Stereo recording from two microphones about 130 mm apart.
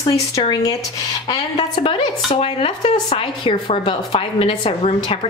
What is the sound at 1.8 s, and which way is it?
A woman's voice, 45° left (ahead or behind).